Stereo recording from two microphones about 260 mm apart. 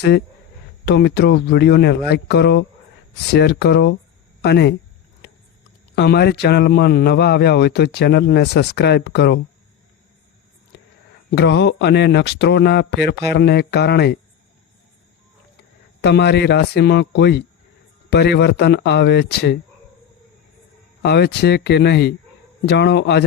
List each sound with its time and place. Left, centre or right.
0.9 s speech: left
6.0 s speech: left
11.3 s speech: left
16.0 s speech: left
21.0 s speech: left